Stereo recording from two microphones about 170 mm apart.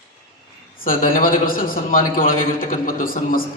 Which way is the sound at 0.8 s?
55° left (ahead or behind).